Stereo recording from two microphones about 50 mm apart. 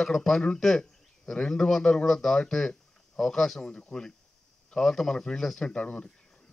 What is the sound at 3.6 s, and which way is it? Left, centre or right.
Speech, centre.